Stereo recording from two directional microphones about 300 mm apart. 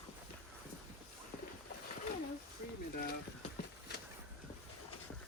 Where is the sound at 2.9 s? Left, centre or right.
Left.